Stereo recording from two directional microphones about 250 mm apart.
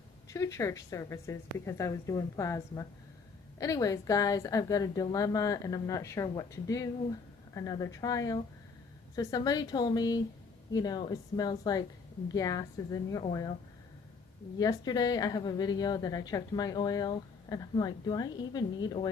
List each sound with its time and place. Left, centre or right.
0.3 s a woman's voice: centre
14.6 s a woman's voice: centre